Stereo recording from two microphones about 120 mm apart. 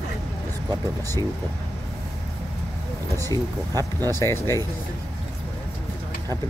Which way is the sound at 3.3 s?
30° right (ahead or behind).